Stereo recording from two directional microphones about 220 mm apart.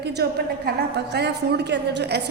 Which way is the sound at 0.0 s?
50° right (ahead or behind).